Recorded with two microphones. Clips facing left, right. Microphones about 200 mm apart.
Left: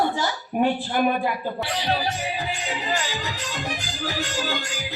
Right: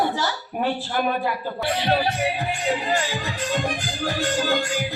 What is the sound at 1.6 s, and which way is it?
Music, 55° right (ahead or behind).